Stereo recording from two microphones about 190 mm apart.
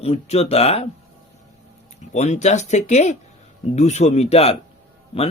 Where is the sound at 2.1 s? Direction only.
35° left (ahead or behind).